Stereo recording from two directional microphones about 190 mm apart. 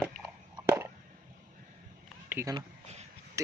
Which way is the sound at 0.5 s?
15° right (ahead or behind).